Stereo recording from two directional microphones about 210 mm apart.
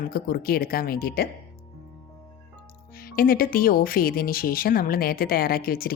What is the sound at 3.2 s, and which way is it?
Speech, 45° left (ahead or behind).